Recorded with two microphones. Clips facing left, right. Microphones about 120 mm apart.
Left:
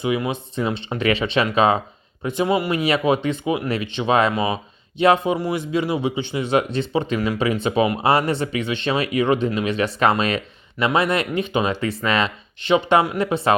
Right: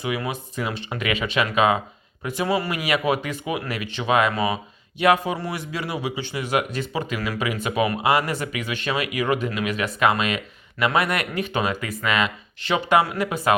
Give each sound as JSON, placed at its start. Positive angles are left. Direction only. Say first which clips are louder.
{"t": 0.0, "sound": "speech", "louder": "left 5 dB", "side_deg": 20}